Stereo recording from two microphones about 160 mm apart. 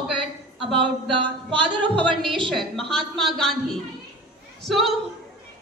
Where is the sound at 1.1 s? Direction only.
30° right (ahead or behind).